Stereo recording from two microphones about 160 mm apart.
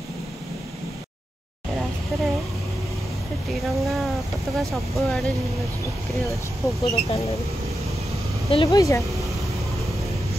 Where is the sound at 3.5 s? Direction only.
Centre (ahead or behind).